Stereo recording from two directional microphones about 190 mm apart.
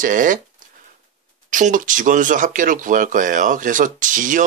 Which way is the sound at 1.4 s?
45° right (ahead or behind).